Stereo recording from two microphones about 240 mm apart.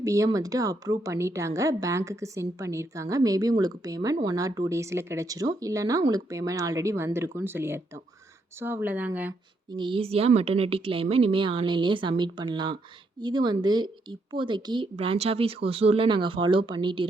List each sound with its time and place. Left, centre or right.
0.0 s a woman's voice: centre
9.7 s a woman's voice: right